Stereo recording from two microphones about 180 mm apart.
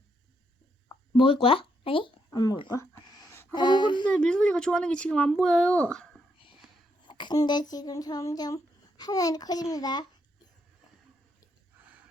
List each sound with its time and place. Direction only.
1.1 s speech: 30° left (ahead or behind); by 3.6 s 15° left (ahead or behind)
3.6 s speech: 25° left (ahead or behind)
4.0 s speech: 5° left (ahead or behind)
7.1 s speech: 25° left (ahead or behind)